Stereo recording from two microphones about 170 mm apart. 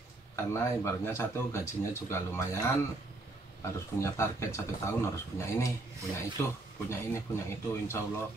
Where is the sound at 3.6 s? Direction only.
15° left (ahead or behind).